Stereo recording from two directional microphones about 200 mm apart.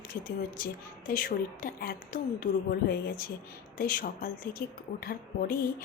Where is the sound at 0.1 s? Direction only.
45° left (ahead or behind).